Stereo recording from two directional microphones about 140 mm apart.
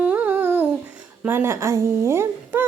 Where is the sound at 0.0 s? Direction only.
10° right (ahead or behind).